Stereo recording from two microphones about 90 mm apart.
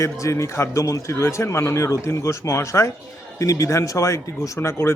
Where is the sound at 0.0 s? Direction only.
35° left (ahead or behind).